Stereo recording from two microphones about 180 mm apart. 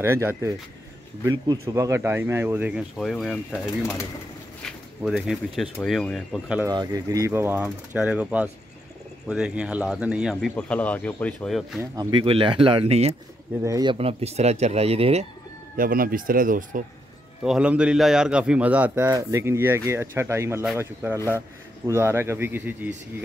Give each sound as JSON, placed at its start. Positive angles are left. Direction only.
{"t": 0.0, "sound": "speech", "side_deg": -15}
{"t": 3.0, "sound": "speech", "side_deg": 5}
{"t": 4.6, "sound": "speech", "side_deg": -5}
{"t": 6.7, "sound": "speech", "side_deg": -20}
{"t": 10.5, "sound": "speech", "side_deg": 10}
{"t": 11.8, "sound": "speech", "side_deg": -20}
{"t": 13.6, "sound": "speech", "side_deg": -20}
{"t": 13.9, "sound": "speech", "side_deg": -35}
{"t": 15.7, "sound": "speech", "side_deg": -50}
{"t": 17.4, "sound": "speech", "side_deg": -5}